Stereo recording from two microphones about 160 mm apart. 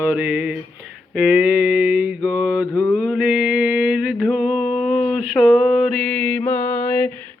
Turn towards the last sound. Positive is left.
turn(degrees=10)  # may be behind; listen again after turning